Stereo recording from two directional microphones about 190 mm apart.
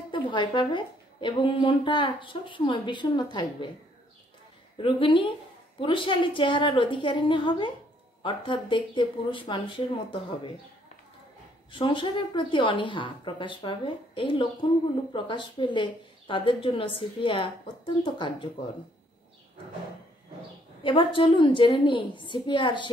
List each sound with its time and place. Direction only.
0.1 s a woman's voice: 25° left (ahead or behind)
4.7 s a woman's voice: 25° left (ahead or behind)
11.7 s a woman's voice: 25° left (ahead or behind)
20.8 s a woman's voice: 25° left (ahead or behind)